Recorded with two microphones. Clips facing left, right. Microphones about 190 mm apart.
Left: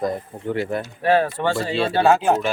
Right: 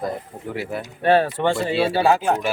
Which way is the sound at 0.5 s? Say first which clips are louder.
Left 4 dB; 5° right (ahead or behind).